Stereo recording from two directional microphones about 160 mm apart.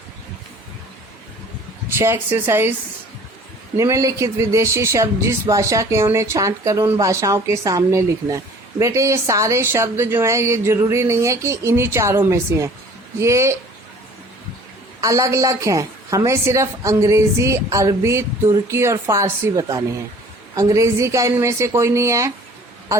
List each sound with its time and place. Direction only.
2.0 s a woman's voice: 15° right (ahead or behind)
3.8 s a woman's voice: 20° right (ahead or behind)
15.0 s a woman's voice: 20° right (ahead or behind)